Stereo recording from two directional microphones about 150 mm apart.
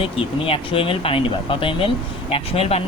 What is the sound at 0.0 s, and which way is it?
Speech, 40° left (ahead or behind).